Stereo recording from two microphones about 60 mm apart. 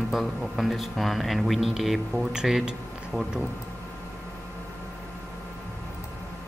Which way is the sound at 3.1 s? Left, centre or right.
Right.